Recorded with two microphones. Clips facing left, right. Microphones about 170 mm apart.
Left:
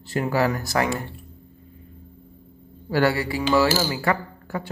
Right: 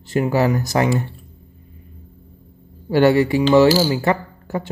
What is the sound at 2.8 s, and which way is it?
A woman's voice, 20° right (ahead or behind).